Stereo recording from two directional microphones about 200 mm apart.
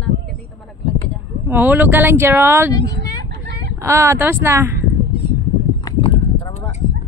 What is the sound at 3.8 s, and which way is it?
Speech, 15° right (ahead or behind).